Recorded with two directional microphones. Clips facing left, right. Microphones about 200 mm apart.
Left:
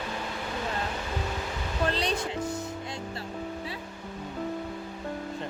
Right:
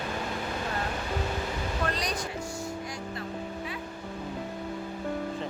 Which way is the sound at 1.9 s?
30° left (ahead or behind).